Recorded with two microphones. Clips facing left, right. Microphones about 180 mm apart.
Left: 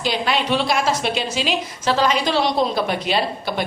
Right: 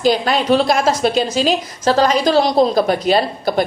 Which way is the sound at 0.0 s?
40° right (ahead or behind).